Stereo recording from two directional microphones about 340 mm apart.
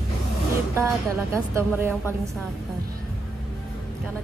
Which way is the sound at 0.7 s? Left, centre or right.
Centre.